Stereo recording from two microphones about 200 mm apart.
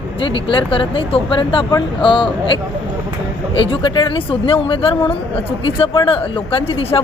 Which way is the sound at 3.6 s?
25° left (ahead or behind).